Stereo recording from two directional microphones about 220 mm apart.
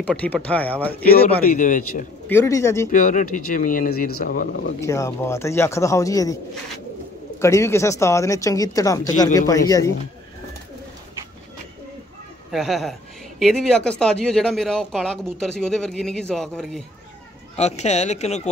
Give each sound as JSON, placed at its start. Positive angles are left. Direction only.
{"t": 0.0, "sound": "speech", "side_deg": 5}
{"t": 1.5, "sound": "speech", "side_deg": 35}
{"t": 2.2, "sound": "speech", "side_deg": 10}
{"t": 2.9, "sound": "speech", "side_deg": 35}
{"t": 4.8, "sound": "speech", "side_deg": 15}
{"t": 7.3, "sound": "speech", "side_deg": 15}
{"t": 12.4, "sound": "speech", "side_deg": 0}
{"t": 17.6, "sound": "speech", "side_deg": 30}